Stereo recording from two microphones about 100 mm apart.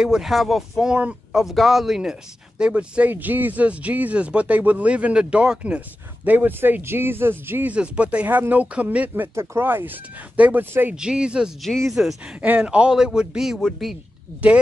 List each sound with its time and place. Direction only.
0.0 s speech: 5° right (ahead or behind); by 11.0 s 20° right (ahead or behind)
11.0 s speech: 10° right (ahead or behind)
11.6 s speech: centre (ahead or behind)
12.4 s speech: 15° right (ahead or behind); by 13.9 s 5° left (ahead or behind)